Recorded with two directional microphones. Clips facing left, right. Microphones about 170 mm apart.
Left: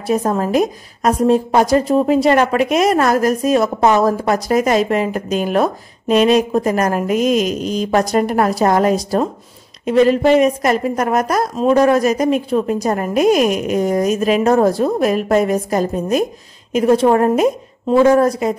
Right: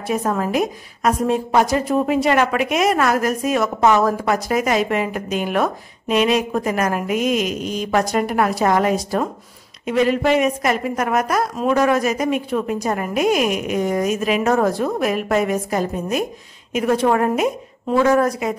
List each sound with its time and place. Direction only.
0.0 s a woman's voice: 35° left (ahead or behind)